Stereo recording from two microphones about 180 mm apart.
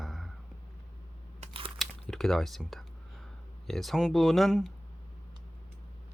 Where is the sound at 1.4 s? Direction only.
30° right (ahead or behind).